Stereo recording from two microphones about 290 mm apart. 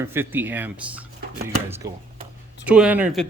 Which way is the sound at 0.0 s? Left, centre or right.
Centre.